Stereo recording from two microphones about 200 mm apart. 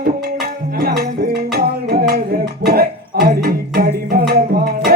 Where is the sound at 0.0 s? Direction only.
50° right (ahead or behind).